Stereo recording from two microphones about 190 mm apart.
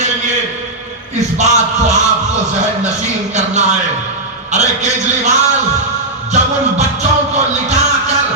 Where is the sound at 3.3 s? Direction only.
35° right (ahead or behind).